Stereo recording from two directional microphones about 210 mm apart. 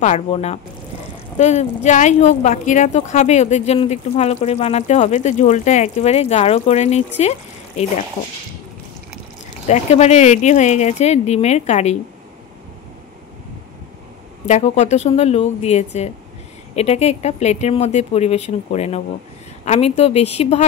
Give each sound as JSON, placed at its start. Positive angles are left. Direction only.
{"t": 0.0, "sound": "speech", "side_deg": 35}
{"t": 9.7, "sound": "speech", "side_deg": 30}
{"t": 14.4, "sound": "speech", "side_deg": 35}